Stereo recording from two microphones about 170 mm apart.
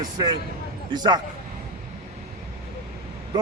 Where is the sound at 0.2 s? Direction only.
20° right (ahead or behind).